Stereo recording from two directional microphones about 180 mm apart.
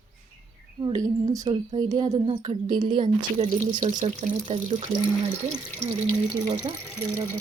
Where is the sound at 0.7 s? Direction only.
20° right (ahead or behind).